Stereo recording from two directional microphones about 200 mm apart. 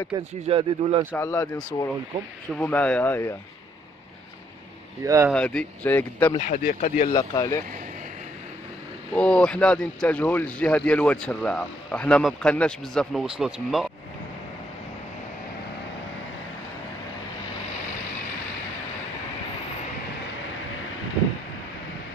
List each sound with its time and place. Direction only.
0.1 s speech: 15° right (ahead or behind)
1.1 s speech: 15° left (ahead or behind)
2.6 s speech: 5° left (ahead or behind)
5.0 s speech: 15° right (ahead or behind)
5.3 s speech: 5° left (ahead or behind)
6.4 s speech: 40° left (ahead or behind)
7.1 s speech: 20° left (ahead or behind)
9.1 s speech: 5° left (ahead or behind)